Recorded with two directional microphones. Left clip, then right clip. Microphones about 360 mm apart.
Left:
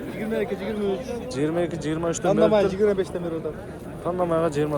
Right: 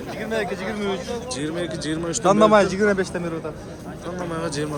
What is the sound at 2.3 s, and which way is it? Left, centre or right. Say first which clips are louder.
Speech: right 4 dB; centre.